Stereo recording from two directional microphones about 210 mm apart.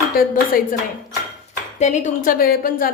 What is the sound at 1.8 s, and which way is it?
A woman's voice, 35° left (ahead or behind).